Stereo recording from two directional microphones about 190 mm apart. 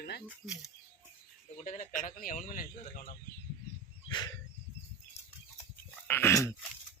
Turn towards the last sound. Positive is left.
turn(degrees=15)  # may be behind; listen again after turning